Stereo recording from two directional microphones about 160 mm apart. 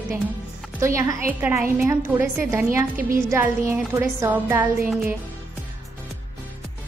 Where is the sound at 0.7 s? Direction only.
15° right (ahead or behind).